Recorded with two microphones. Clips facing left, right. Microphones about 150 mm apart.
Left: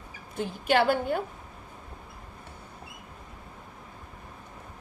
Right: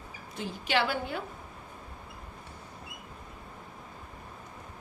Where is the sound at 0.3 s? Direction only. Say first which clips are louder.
Left 5 dB; 50° left (ahead or behind).